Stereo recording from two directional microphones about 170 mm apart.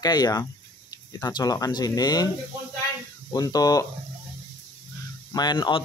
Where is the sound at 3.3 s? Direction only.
20° left (ahead or behind).